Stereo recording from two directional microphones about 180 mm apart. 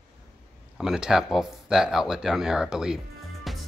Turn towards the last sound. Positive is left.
turn(degrees=0)  # may be behind; listen again after turning